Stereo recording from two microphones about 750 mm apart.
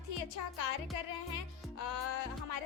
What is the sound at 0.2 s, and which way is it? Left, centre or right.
A woman's voice, left.